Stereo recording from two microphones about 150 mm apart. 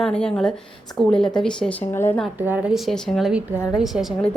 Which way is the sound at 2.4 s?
10° right (ahead or behind).